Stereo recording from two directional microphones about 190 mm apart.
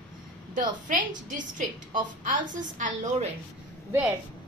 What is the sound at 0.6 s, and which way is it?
Speech, 45° right (ahead or behind).